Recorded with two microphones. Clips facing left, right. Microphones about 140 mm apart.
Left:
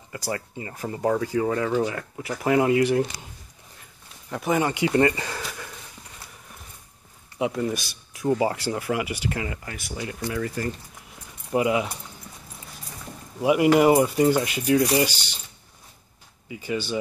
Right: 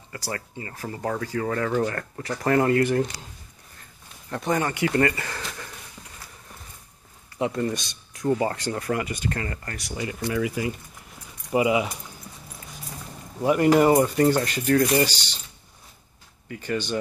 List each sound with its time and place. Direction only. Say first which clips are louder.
0.1 s speech: left 3 dB; 20° left (ahead or behind)
4.3 s speech: left 1 dB; 5° left (ahead or behind)
5.4 s sniff: left 1 dB; 5° left (ahead or behind)
7.3 s speech: even; 5° left (ahead or behind)
11.1 s keys jangling: right 1 dB; 5° right (ahead or behind)
13.4 s speech: even; 10° left (ahead or behind)
16.4 s speech: even; 10° left (ahead or behind)